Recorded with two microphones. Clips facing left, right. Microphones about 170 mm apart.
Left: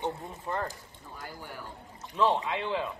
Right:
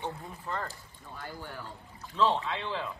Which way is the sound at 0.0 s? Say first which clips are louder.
Left 4 dB; 20° left (ahead or behind).